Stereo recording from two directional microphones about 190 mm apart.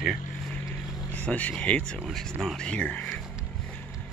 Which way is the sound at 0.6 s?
10° left (ahead or behind).